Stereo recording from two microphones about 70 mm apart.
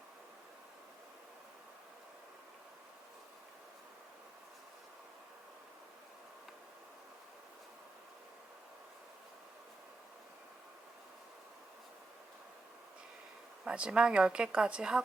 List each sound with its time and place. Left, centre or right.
13.7 s speech: centre